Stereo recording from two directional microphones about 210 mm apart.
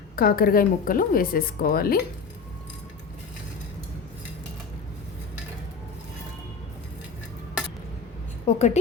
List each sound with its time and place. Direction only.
0.2 s a woman's voice: 45° left (ahead or behind)
8.4 s a woman's voice: 30° left (ahead or behind)